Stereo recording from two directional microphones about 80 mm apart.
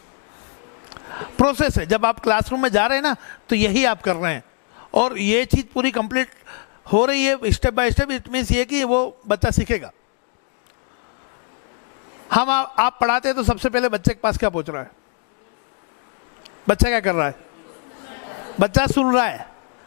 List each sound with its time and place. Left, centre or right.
1.0 s speech: left
12.3 s speech: centre
16.6 s speech: centre
18.1 s a sound: centre
18.6 s speech: centre